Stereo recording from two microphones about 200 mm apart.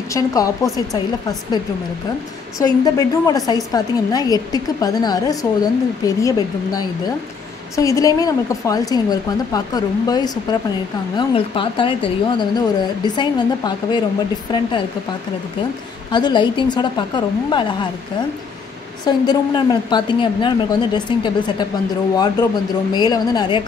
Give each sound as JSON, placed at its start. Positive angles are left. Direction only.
{"t": 0.1, "sound": "a woman's voice", "side_deg": 15}
{"t": 16.1, "sound": "a woman's voice", "side_deg": 20}
{"t": 19.0, "sound": "a woman's voice", "side_deg": 20}